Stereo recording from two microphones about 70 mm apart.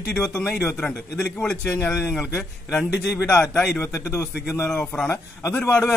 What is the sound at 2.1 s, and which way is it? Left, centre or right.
A man's voice, left.